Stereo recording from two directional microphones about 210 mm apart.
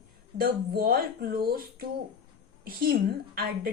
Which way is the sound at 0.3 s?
45° right (ahead or behind).